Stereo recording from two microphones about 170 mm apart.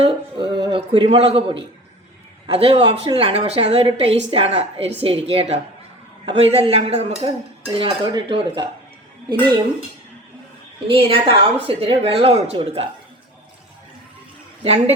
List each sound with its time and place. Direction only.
0.0 s speech: 30° right (ahead or behind)
10.8 s speech: 30° right (ahead or behind)
14.6 s speech: 35° right (ahead or behind)